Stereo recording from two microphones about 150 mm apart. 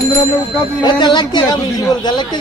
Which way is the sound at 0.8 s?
30° left (ahead or behind).